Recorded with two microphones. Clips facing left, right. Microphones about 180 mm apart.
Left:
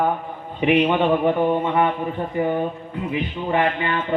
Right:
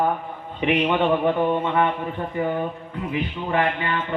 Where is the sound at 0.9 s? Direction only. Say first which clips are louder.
Left 2 dB; 10° left (ahead or behind).